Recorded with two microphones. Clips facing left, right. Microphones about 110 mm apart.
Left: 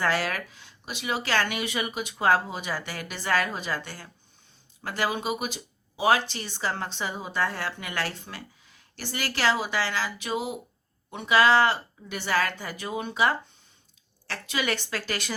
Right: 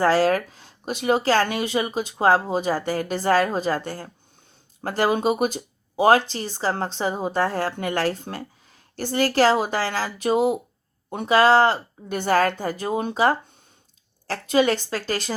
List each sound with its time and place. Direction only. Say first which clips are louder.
0.0 s speech: right 9 dB; 35° right (ahead or behind)